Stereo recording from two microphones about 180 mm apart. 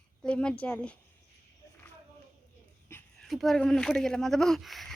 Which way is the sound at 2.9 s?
15° left (ahead or behind).